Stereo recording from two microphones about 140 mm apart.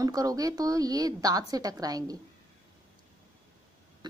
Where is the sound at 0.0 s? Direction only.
25° right (ahead or behind).